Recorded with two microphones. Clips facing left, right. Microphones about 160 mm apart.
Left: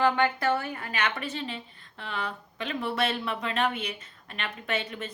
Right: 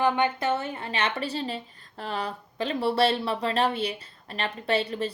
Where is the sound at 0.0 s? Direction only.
20° right (ahead or behind).